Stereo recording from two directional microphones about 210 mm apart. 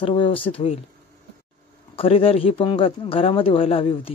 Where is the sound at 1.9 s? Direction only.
25° left (ahead or behind).